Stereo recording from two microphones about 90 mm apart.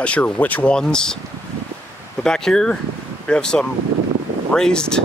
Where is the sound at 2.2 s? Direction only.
5° left (ahead or behind).